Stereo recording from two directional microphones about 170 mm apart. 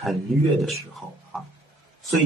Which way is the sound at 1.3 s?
Centre (ahead or behind).